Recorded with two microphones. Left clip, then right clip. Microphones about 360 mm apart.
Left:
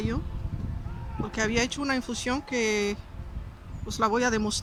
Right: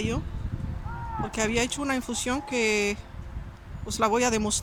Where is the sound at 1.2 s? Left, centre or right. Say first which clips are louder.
Even; centre.